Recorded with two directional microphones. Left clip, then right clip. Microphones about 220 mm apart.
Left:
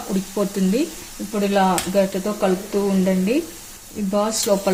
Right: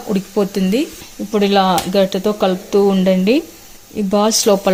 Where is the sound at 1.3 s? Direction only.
45° right (ahead or behind).